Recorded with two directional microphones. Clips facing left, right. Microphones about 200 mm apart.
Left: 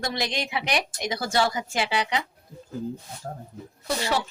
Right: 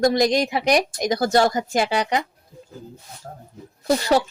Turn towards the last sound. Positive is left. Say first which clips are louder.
# right 8 dB
turn(degrees=-40)  # may be behind; listen again after turning